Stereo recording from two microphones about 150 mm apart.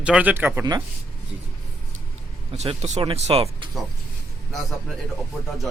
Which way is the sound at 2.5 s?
45° right (ahead or behind).